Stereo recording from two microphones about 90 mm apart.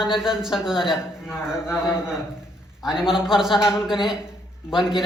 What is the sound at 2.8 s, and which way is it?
A man's voice, 5° right (ahead or behind).